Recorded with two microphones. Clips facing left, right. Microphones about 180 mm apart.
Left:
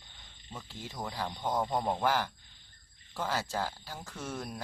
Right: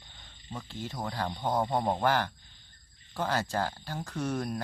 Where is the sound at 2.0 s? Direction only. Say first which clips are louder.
Right 2 dB; 5° left (ahead or behind).